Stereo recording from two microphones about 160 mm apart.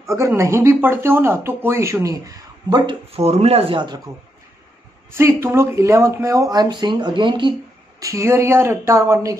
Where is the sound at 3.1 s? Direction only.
40° right (ahead or behind).